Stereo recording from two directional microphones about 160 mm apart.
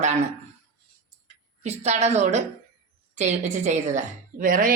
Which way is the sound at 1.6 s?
45° right (ahead or behind).